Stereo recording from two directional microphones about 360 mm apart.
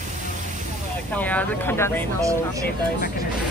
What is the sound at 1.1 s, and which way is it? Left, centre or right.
Speech, centre.